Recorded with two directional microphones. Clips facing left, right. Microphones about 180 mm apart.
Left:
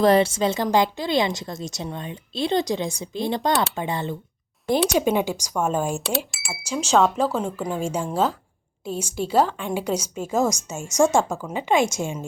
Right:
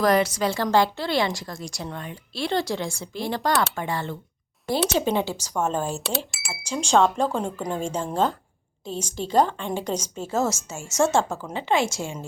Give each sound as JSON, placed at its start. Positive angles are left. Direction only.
{"t": 0.0, "sound": "a woman's voice", "side_deg": 25}
{"t": 6.0, "sound": "a woman's voice", "side_deg": 0}